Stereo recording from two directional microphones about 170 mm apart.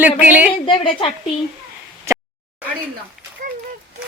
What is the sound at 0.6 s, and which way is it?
Speech, 30° left (ahead or behind).